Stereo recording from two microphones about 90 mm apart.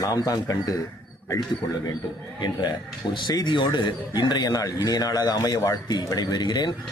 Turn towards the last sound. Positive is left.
turn(degrees=50)  # may be behind; listen again after turning